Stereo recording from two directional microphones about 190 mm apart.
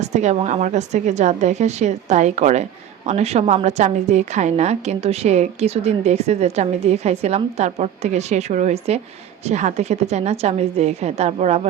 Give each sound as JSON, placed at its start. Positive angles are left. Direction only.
{"t": 0.0, "sound": "a woman's voice", "side_deg": -35}